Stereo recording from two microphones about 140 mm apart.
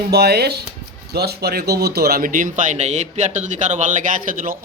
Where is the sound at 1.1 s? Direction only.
90° right.